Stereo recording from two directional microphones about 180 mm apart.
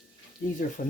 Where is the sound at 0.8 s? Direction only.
45° left (ahead or behind).